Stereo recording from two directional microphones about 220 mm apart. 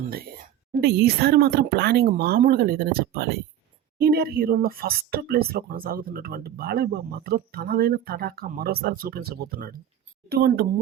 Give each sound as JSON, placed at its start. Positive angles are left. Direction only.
{"t": 0.1, "sound": "speech", "side_deg": -40}